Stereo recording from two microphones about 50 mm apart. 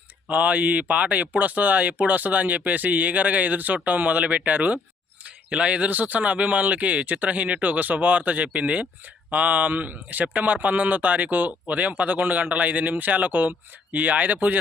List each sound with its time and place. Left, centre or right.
0.3 s speech: right